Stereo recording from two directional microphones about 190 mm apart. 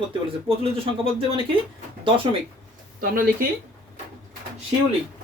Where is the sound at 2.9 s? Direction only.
50° right (ahead or behind).